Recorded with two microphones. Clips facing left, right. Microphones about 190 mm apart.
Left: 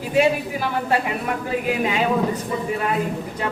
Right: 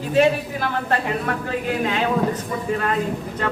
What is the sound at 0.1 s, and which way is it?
Speech, 10° left (ahead or behind).